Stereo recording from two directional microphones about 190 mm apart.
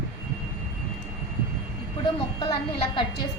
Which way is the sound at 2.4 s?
25° left (ahead or behind).